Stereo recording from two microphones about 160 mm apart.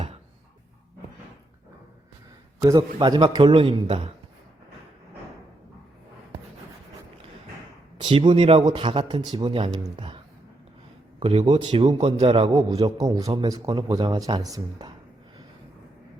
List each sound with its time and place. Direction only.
2.6 s a man's voice: 25° right (ahead or behind)
7.9 s a man's voice: 30° right (ahead or behind)
11.2 s a man's voice: 35° right (ahead or behind)